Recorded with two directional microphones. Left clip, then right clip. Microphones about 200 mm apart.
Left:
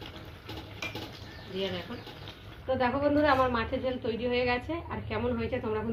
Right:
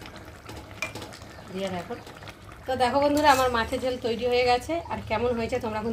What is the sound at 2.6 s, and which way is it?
A woman's voice, 70° right (ahead or behind).